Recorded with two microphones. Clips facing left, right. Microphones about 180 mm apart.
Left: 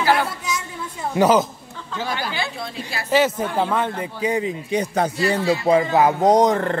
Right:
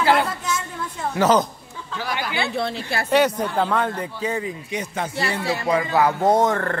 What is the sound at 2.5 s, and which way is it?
Speech, 75° right (ahead or behind).